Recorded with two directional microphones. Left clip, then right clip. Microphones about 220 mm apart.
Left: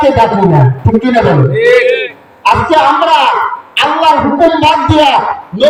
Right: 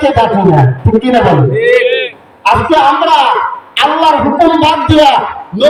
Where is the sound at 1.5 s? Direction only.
20° left (ahead or behind).